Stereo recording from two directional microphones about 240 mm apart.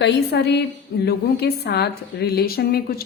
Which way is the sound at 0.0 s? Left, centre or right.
Left.